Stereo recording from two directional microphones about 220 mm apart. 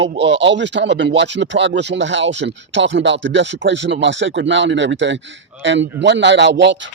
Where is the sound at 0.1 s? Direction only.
55° right (ahead or behind).